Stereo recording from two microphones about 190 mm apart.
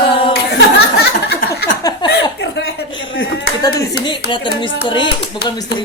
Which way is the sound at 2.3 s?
60° left (ahead or behind).